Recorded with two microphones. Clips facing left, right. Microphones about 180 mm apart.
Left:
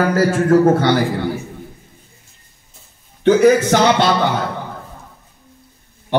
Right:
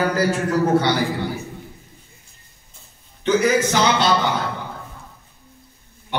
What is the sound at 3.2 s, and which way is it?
Speech, 55° left (ahead or behind).